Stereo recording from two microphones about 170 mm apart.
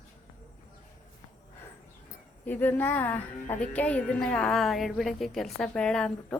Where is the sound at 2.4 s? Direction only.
10° left (ahead or behind).